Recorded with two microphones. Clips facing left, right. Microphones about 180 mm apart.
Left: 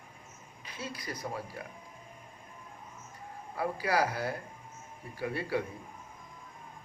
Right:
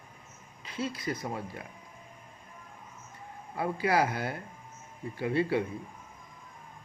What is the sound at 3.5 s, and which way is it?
A man's voice, 25° right (ahead or behind).